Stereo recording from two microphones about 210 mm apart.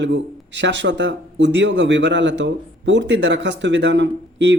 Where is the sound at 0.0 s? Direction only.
60° right (ahead or behind).